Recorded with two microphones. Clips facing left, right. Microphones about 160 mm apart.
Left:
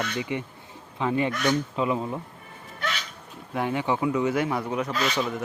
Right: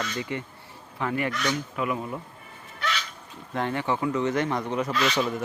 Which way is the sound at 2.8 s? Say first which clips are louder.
Right 1 dB; 45° left (ahead or behind).